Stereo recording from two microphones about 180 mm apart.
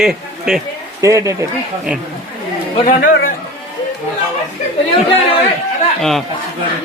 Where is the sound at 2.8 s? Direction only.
45° left (ahead or behind).